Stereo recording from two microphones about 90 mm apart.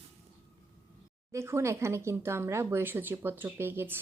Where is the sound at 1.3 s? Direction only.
30° right (ahead or behind).